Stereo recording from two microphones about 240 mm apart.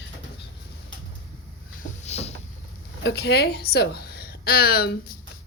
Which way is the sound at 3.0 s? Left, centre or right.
Left.